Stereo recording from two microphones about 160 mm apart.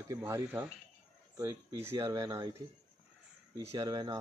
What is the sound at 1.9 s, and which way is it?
Speech, 20° right (ahead or behind).